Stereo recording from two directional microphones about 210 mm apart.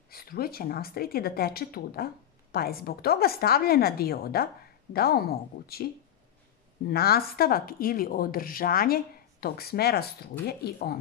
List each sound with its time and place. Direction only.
0.1 s a woman's voice: 45° left (ahead or behind)
6.9 s a woman's voice: 50° left (ahead or behind)